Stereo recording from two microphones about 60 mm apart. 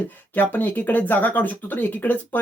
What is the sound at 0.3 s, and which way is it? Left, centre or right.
Speech, left.